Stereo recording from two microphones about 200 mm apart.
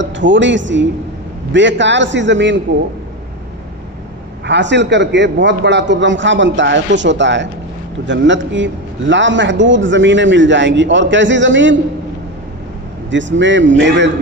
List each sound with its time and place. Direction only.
0.0 s a man's voice: 65° right (ahead or behind)
4.5 s a man's voice: 60° right (ahead or behind)
13.1 s a man's voice: 65° right (ahead or behind)